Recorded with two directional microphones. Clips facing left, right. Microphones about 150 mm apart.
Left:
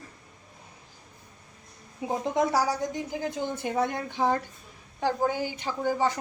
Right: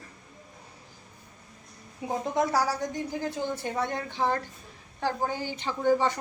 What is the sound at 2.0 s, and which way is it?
Speech, 15° left (ahead or behind).